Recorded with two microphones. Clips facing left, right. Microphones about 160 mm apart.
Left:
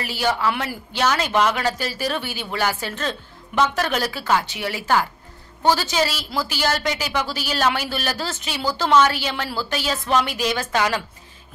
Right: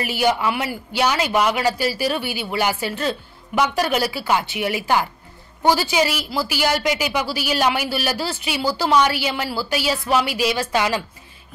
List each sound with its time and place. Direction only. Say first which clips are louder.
0.0 s speech: right 2 dB; 15° right (ahead or behind)